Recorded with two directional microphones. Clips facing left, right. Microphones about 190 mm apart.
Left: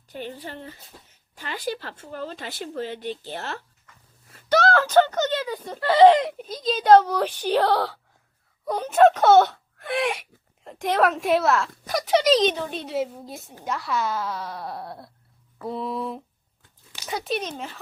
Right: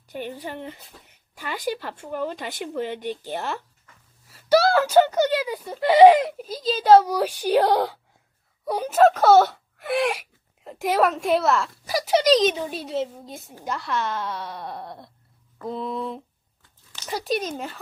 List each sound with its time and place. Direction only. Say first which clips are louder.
0.1 s speech: right 3 dB; 15° right (ahead or behind)
6.2 s speech: even; centre (ahead or behind)